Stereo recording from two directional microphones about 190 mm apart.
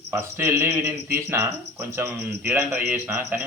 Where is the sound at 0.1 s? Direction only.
10° right (ahead or behind).